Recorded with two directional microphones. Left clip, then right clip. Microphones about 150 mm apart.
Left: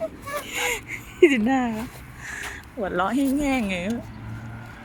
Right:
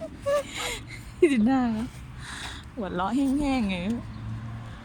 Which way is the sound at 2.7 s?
5° right (ahead or behind).